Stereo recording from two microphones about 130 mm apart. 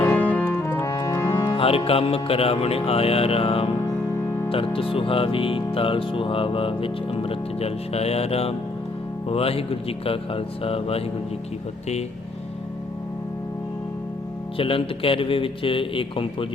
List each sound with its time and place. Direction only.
0.0 s music: 15° left (ahead or behind)
1.5 s speech: 45° left (ahead or behind)
14.6 s speech: 45° left (ahead or behind)